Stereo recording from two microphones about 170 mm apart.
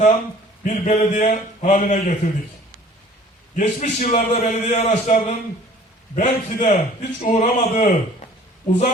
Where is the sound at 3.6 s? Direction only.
45° left (ahead or behind).